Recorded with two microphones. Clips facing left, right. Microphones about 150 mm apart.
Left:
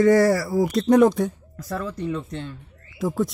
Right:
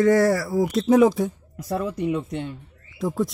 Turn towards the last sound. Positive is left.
turn(degrees=0)  # may be behind; listen again after turning